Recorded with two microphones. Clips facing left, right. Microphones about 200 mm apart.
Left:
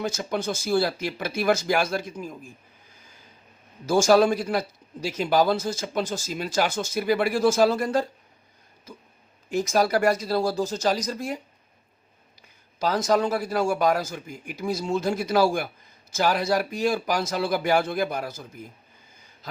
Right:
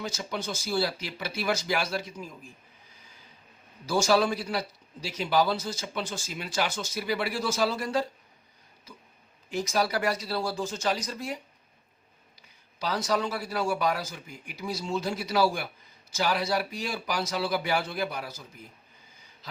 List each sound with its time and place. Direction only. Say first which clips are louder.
0.0 s a man's voice: left 6 dB; 50° left (ahead or behind)
3.8 s a man's voice: left 6 dB; 50° left (ahead or behind)
12.4 s a man's voice: left 8 dB; 50° left (ahead or behind)